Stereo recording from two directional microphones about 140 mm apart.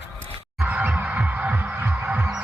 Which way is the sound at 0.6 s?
10° right (ahead or behind).